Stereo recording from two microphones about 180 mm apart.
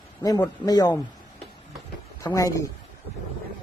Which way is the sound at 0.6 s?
20° left (ahead or behind).